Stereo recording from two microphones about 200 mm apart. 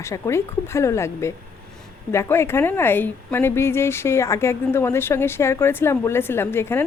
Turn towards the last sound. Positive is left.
turn(degrees=10)  # may be behind; listen again after turning